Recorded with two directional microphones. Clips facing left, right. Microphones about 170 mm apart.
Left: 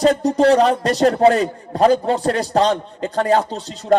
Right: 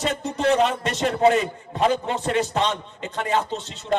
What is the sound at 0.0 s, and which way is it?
A man's voice, 35° left (ahead or behind).